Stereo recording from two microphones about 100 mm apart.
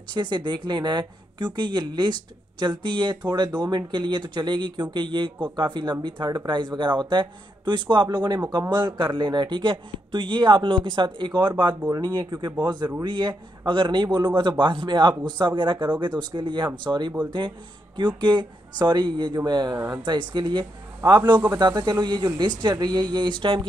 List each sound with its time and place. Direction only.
0.1 s speech: 50° right (ahead or behind)